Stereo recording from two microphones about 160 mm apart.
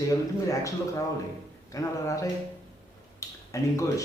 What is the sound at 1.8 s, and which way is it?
Speech, 20° left (ahead or behind).